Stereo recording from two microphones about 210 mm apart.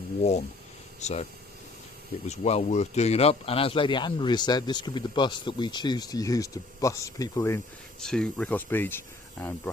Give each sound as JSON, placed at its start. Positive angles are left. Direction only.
{"t": 0.2, "sound": "speech", "side_deg": 35}
{"t": 7.9, "sound": "speech", "side_deg": 5}